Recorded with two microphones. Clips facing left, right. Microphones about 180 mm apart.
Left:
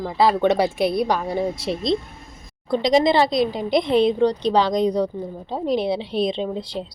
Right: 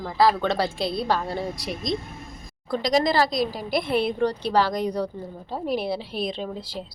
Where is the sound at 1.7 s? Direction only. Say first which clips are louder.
Left 6 dB; 30° left (ahead or behind).